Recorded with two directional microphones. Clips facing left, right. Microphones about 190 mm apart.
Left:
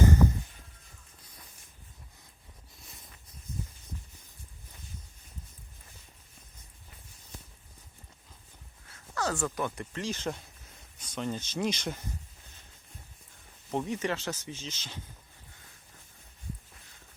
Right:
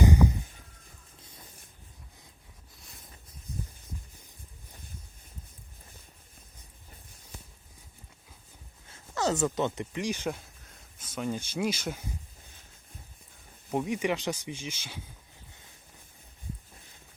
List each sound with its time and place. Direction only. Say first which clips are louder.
0.0 s a sound: right 1 dB; 15° right (ahead or behind)
8.9 s speech: right 4 dB; 20° right (ahead or behind)
13.7 s speech: right 2 dB; 10° right (ahead or behind)